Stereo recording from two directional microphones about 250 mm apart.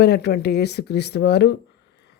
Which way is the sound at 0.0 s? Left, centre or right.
Left.